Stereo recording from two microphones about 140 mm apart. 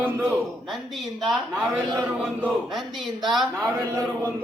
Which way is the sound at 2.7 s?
Centre (ahead or behind).